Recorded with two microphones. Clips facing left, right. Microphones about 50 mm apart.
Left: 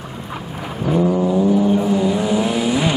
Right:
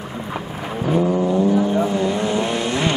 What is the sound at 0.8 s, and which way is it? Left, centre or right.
Vehicle, centre.